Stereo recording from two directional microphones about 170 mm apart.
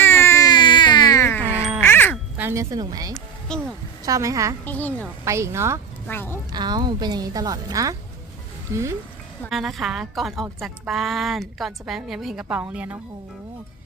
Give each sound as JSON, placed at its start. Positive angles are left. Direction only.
{"t": 0.0, "sound": "baby cry", "side_deg": 15}
{"t": 1.8, "sound": "quack", "side_deg": 10}
{"t": 2.4, "sound": "a woman's voice", "side_deg": -15}
{"t": 3.5, "sound": "a woman's voice", "side_deg": 5}
{"t": 4.0, "sound": "a woman's voice", "side_deg": -20}
{"t": 4.6, "sound": "a woman's voice", "side_deg": 10}
{"t": 5.2, "sound": "speech", "side_deg": -15}
{"t": 6.1, "sound": "a woman's voice", "side_deg": 10}
{"t": 6.5, "sound": "a woman's voice", "side_deg": -25}
{"t": 9.5, "sound": "a woman's voice", "side_deg": 0}